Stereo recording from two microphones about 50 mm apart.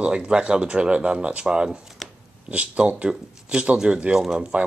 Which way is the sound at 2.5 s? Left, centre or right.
Right.